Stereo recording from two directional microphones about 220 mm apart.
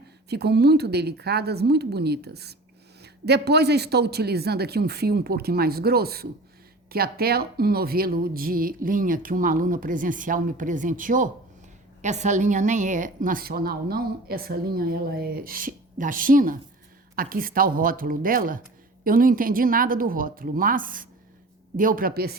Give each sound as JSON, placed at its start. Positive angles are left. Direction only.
{"t": 0.3, "sound": "a man's voice", "side_deg": -50}